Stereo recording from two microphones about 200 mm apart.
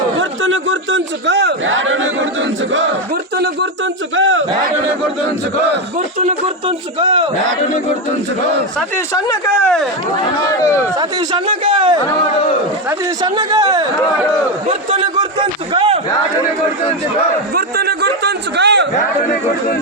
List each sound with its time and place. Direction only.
0.2 s a man's voice: 75° right (ahead or behind)
3.3 s a sound: 55° right (ahead or behind)
4.1 s a sound: 75° right (ahead or behind)
6.1 s speech: 30° right (ahead or behind)
9.1 s speech: 10° left (ahead or behind)
10.6 s speech: 15° left (ahead or behind)
10.9 s speech: 25° right (ahead or behind)
13.2 s a man's voice: 20° right (ahead or behind)
17.5 s chatter: 50° right (ahead or behind)